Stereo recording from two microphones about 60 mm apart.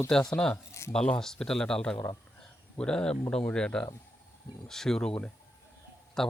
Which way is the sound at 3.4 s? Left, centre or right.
Centre.